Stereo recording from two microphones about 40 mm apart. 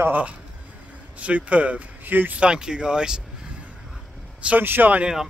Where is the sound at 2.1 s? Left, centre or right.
Right.